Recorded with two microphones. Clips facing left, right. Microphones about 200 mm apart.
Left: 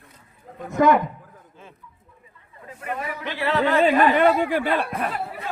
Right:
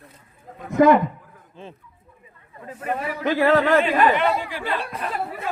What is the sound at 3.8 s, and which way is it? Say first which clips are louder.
Speech: left 2 dB; 45° left (ahead or behind).